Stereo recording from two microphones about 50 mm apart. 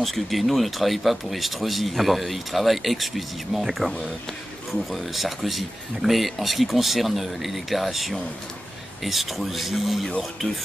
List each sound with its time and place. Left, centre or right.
0.0 s speech: centre